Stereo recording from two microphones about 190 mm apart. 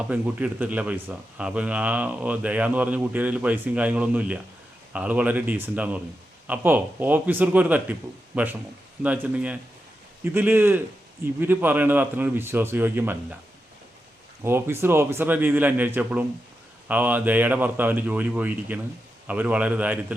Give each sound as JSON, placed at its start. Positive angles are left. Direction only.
{"t": 0.1, "sound": "speech", "side_deg": -5}
{"t": 14.4, "sound": "speech", "side_deg": -10}